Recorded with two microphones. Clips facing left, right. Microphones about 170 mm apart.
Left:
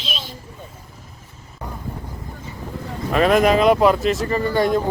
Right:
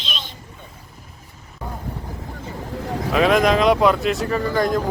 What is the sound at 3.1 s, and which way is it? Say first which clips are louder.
Speech: left 1 dB; centre (ahead or behind).